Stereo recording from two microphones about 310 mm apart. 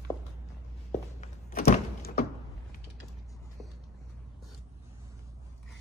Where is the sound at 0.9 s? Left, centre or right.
Left.